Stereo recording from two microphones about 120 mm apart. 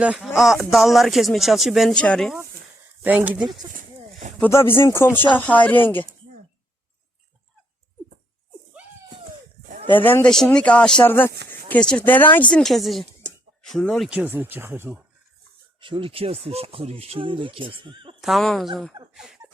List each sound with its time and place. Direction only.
0.0 s speech: 5° right (ahead or behind)
3.0 s speech: 15° right (ahead or behind)
4.4 s speech: 20° left (ahead or behind)
10.0 s speech: 15° left (ahead or behind)
10.2 s speech: 5° left (ahead or behind)
14.1 s speech: 15° right (ahead or behind)
15.8 s speech: 45° right (ahead or behind)
18.2 s speech: centre (ahead or behind)
19.1 s a sound: 5° right (ahead or behind)